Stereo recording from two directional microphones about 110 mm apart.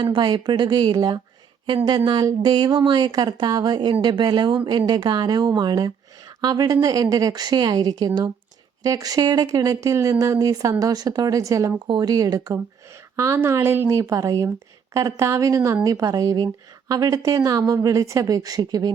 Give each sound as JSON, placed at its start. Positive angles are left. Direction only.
{"t": 0.0, "sound": "a woman's voice", "side_deg": -45}